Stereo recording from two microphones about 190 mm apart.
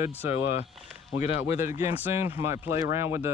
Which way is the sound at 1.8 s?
10° right (ahead or behind).